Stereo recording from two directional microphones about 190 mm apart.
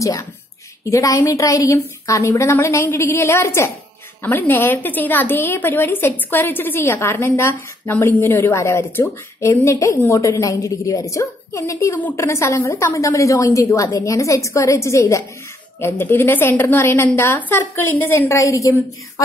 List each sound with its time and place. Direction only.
0.0 s a woman's voice: 15° left (ahead or behind)